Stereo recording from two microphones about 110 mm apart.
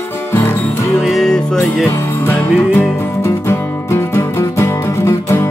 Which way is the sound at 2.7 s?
25° left (ahead or behind).